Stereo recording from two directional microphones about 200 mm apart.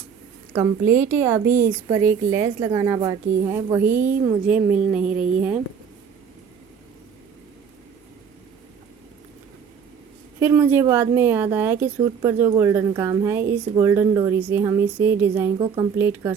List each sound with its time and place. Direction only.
0.9 s a woman's voice: 10° right (ahead or behind)
10.4 s a woman's voice: 10° right (ahead or behind)
15.5 s speech: 25° right (ahead or behind)
16.0 s a woman's voice: 10° right (ahead or behind)